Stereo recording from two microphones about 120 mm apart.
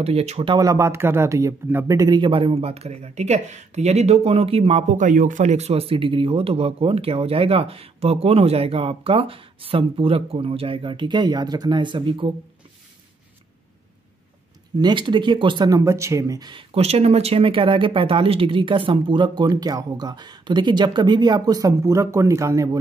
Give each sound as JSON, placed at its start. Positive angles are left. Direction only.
{"t": 0.0, "sound": "speech", "side_deg": -60}
{"t": 0.6, "sound": "speech", "side_deg": -25}
{"t": 14.8, "sound": "speech", "side_deg": -40}
{"t": 16.7, "sound": "speech", "side_deg": -60}